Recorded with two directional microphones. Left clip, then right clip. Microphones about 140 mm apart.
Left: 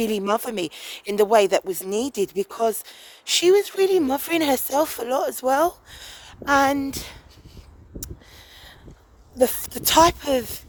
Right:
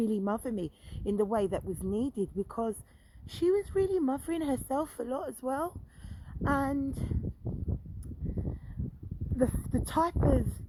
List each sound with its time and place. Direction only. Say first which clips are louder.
0.0 s speech: left 10 dB; 40° left (ahead or behind)
9.4 s speech: left 10 dB; 40° left (ahead or behind)